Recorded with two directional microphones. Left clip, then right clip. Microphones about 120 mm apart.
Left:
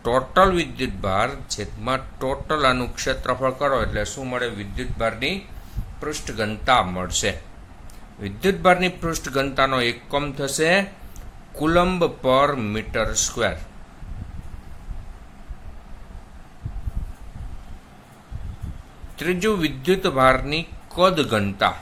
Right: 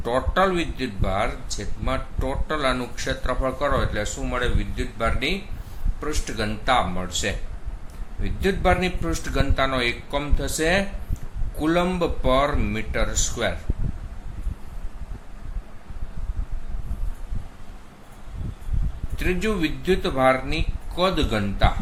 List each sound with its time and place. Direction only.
0.0 s a man's voice: 45° left (ahead or behind)
19.1 s speech: 50° left (ahead or behind)